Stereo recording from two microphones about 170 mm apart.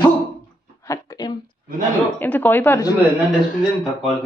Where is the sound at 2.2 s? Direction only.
10° left (ahead or behind).